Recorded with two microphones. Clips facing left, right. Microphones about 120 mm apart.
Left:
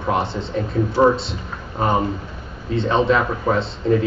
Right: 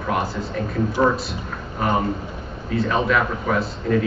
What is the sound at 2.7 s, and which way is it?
A man's voice, 25° left (ahead or behind).